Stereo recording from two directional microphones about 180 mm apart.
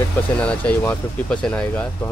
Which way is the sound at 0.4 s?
5° left (ahead or behind).